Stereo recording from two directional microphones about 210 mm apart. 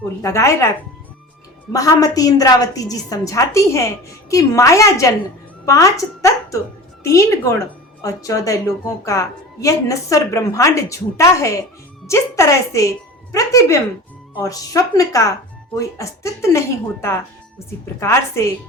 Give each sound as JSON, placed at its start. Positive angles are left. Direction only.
{"t": 0.2, "sound": "a woman's voice", "side_deg": 15}
{"t": 1.7, "sound": "a woman's voice", "side_deg": 15}